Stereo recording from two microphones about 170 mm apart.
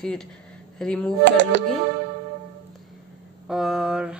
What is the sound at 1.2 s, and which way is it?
Music, 90° right.